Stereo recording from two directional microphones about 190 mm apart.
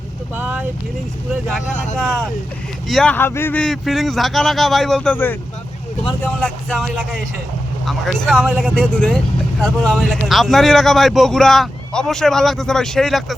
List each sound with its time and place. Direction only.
0.3 s speech: 10° right (ahead or behind)
2.0 s speech: 5° left (ahead or behind)